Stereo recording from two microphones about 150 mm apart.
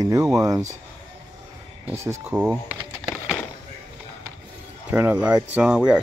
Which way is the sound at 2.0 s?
10° right (ahead or behind).